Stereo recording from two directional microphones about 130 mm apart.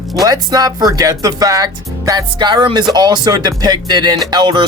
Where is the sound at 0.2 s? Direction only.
30° right (ahead or behind).